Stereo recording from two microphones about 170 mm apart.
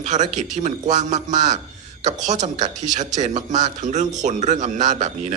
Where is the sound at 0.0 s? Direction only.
45° right (ahead or behind).